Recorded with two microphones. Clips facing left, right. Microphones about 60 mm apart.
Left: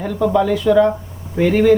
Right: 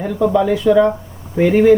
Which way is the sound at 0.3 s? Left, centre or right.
Centre.